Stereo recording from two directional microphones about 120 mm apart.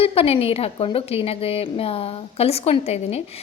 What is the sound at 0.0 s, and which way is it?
A woman's voice, 55° left (ahead or behind).